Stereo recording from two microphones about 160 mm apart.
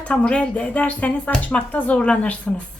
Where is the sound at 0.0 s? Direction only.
10° left (ahead or behind).